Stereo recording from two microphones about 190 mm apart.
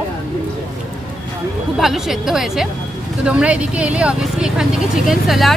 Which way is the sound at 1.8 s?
Centre (ahead or behind).